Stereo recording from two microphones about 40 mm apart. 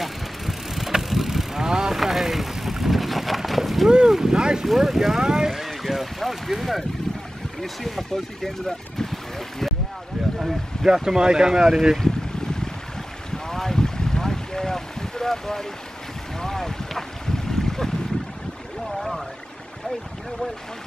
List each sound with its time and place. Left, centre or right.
0.0 s vehicle: centre
2.0 s boat: centre
4.1 s boat: centre
4.6 s speech: centre
10.2 s a sound: centre
10.9 s speech: centre
13.5 s boat: centre
17.5 s a sound: centre
18.9 s pour: centre